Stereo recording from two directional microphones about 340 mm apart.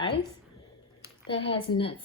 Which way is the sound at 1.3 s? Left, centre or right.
Centre.